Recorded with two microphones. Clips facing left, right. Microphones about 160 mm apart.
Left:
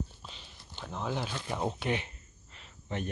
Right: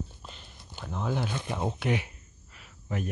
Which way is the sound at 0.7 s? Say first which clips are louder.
Right 3 dB; 10° right (ahead or behind).